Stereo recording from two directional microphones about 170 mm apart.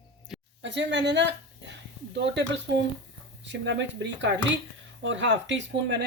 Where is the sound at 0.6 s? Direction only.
90° right.